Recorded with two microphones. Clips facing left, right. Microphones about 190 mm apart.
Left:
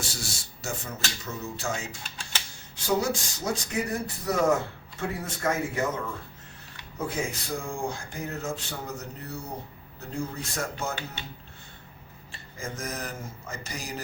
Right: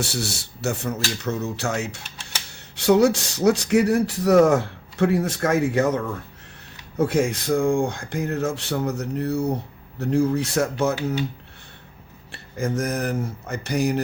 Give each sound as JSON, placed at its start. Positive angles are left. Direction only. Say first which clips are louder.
{"t": 0.0, "sound": "speech", "louder": "right 9 dB", "side_deg": -70}
{"t": 7.0, "sound": "speech", "louder": "right 10 dB", "side_deg": -80}
{"t": 7.6, "sound": "speech", "louder": "right 12 dB", "side_deg": -90}
{"t": 12.3, "sound": "speech", "louder": "right 12 dB", "side_deg": -65}